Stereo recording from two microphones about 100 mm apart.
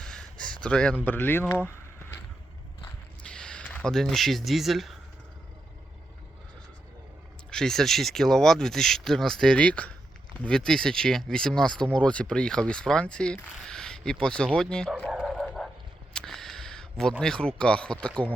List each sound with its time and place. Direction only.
0.0 s a sound: 10° left (ahead or behind)
1.0 s speech: 20° left (ahead or behind)
3.2 s speech: 10° left (ahead or behind)
7.5 s speech: 5° left (ahead or behind)
15.2 s bow-wow: 5° left (ahead or behind)
16.1 s speech: 5° left (ahead or behind)